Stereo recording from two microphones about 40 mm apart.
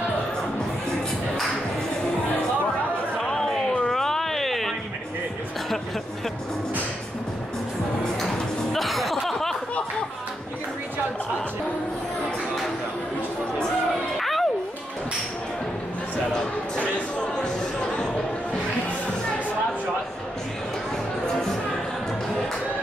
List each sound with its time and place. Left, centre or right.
3.2 s a sound: centre
8.2 s music: centre
9.2 s snicker: centre
14.1 s music: centre
16.3 s music: left